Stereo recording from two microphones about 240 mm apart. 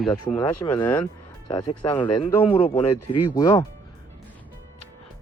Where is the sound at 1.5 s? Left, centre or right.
Centre.